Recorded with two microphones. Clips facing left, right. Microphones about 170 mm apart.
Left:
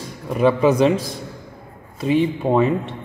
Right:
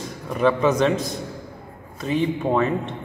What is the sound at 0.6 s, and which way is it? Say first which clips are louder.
Speech: left 4 dB; 30° left (ahead or behind).